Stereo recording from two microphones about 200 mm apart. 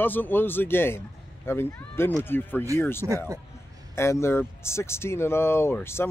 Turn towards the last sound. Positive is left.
turn(degrees=10)  # may be behind; listen again after turning